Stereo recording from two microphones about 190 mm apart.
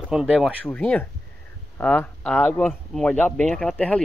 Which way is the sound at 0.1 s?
Centre (ahead or behind).